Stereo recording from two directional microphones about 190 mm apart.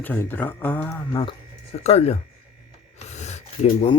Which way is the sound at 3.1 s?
35° left (ahead or behind).